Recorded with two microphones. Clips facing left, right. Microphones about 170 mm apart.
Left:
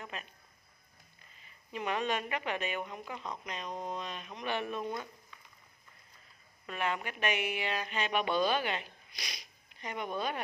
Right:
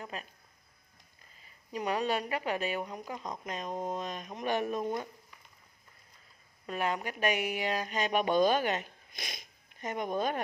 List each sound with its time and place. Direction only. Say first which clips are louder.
0.0 s speech: right 2 dB; 35° right (ahead or behind)
1.7 s a woman's voice: right 2 dB; 40° right (ahead or behind)
6.6 s speech: right 2 dB; 40° right (ahead or behind)